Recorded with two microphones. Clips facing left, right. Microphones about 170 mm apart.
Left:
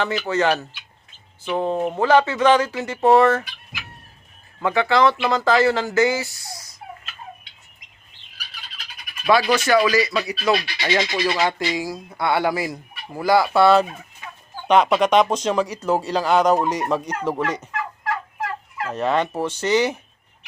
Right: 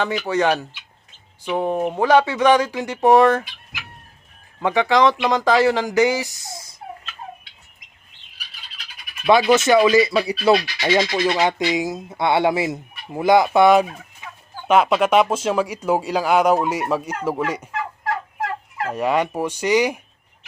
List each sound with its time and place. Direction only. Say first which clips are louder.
0.3 s speech: right 1 dB; 15° right (ahead or behind)
9.2 s speech: right 3 dB; 20° right (ahead or behind)
14.7 s speech: even; 5° right (ahead or behind)
18.9 s speech: right 1 dB; 10° right (ahead or behind)